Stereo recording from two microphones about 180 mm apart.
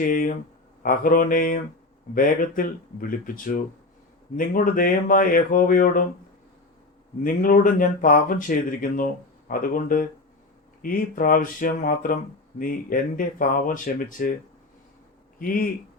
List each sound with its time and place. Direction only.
0.0 s speech: 50° left (ahead or behind)
7.3 s speech: 50° left (ahead or behind)
15.4 s speech: 50° left (ahead or behind)